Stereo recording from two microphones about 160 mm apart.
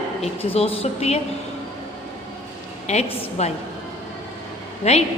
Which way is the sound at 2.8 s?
45° left (ahead or behind).